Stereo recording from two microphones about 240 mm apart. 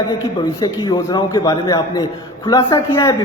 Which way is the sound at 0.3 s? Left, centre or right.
Centre.